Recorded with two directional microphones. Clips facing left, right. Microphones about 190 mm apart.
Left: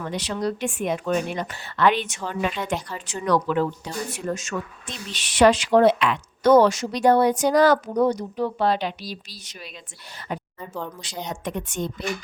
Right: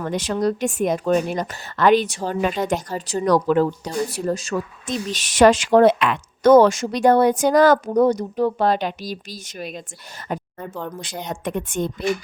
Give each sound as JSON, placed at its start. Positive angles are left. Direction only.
{"t": 0.0, "sound": "speech", "side_deg": -45}
{"t": 10.2, "sound": "a sound", "side_deg": -45}
{"t": 11.0, "sound": "speech", "side_deg": -55}